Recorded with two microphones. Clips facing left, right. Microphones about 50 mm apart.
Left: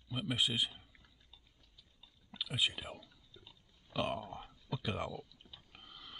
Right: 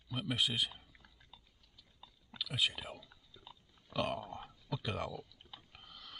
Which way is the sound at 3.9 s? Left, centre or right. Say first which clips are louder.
Even; centre.